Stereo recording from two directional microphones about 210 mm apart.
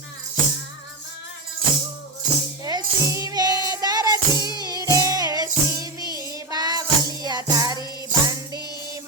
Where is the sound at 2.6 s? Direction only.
15° right (ahead or behind).